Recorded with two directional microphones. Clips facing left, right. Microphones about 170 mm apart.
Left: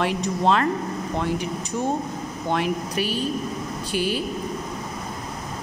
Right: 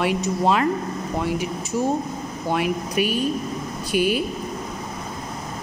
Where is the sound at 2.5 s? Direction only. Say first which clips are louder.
Right 2 dB; 10° right (ahead or behind).